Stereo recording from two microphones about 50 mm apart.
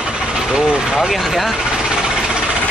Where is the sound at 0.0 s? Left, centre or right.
Centre.